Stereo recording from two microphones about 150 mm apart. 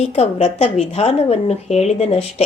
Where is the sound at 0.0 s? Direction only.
45° left (ahead or behind).